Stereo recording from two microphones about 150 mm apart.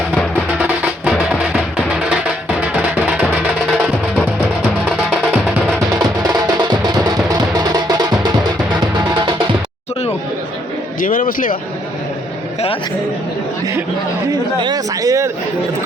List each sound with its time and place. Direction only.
0.6 s music: 5° right (ahead or behind)
6.7 s music: 30° right (ahead or behind)
11.0 s a sound: 65° left (ahead or behind)
14.3 s speech: 25° right (ahead or behind)